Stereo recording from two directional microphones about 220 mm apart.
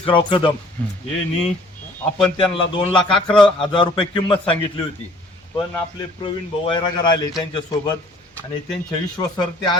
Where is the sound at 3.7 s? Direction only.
25° left (ahead or behind).